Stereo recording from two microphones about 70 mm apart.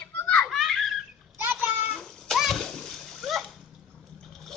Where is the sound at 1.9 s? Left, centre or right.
Centre.